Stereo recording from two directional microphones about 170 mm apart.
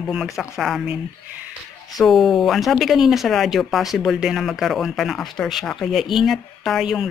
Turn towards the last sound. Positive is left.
turn(degrees=0)  # may be behind; listen again after turning